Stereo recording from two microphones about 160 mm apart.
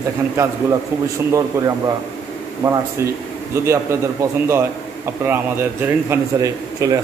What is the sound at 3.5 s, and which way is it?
Speech, 15° right (ahead or behind).